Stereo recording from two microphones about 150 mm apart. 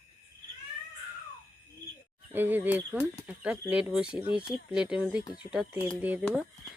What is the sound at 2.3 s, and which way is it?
Speech, 15° right (ahead or behind).